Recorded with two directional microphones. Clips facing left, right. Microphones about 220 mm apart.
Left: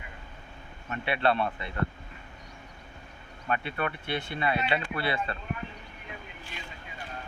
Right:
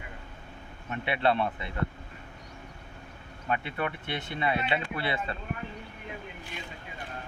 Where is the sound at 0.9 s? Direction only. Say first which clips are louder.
Even; 20° right (ahead or behind).